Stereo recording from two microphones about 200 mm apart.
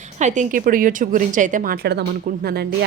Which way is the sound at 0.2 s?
35° right (ahead or behind).